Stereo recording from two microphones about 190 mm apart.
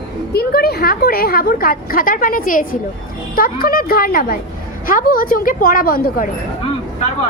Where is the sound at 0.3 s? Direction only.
55° left (ahead or behind).